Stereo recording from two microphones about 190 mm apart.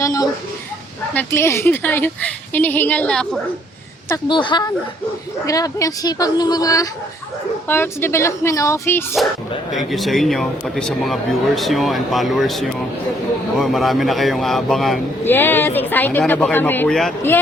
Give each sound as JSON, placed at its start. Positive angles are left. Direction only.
{"t": 0.0, "sound": "a woman's voice", "side_deg": 15}
{"t": 4.1, "sound": "a woman's voice", "side_deg": 25}
{"t": 9.7, "sound": "speech", "side_deg": 0}
{"t": 15.2, "sound": "a woman's voice", "side_deg": 10}